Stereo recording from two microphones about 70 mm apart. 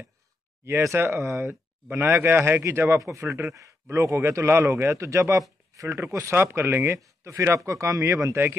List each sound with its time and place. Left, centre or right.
0.7 s speech: right